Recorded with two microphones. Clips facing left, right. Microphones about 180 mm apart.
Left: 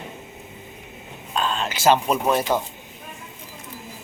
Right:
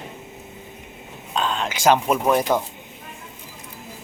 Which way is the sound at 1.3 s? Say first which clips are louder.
Right 1 dB; 15° right (ahead or behind).